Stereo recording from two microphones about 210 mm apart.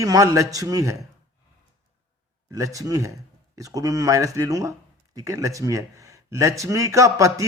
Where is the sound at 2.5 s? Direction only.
15° right (ahead or behind).